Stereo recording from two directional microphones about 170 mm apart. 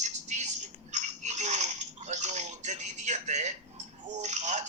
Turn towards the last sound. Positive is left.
turn(degrees=-45)  # may be behind; listen again after turning